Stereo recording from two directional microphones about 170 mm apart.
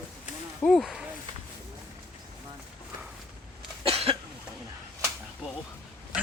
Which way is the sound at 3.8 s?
35° right (ahead or behind).